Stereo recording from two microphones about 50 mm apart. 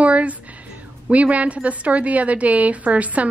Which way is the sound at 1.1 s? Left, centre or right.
Right.